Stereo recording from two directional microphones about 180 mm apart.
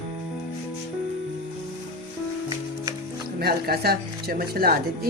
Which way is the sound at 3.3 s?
60° right (ahead or behind).